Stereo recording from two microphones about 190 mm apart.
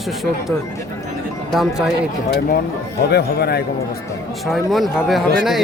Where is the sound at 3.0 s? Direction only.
60° left (ahead or behind).